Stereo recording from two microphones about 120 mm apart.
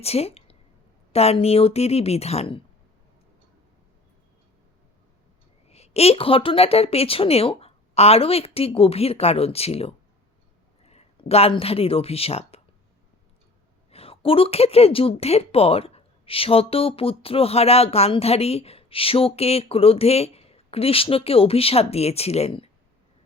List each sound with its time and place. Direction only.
0.0 s a woman's voice: 60° left (ahead or behind)
5.6 s a woman's voice: 60° left (ahead or behind)
10.8 s a sound: 60° left (ahead or behind)
11.5 s a woman's voice: 55° left (ahead or behind)
13.9 s a woman's voice: 55° left (ahead or behind)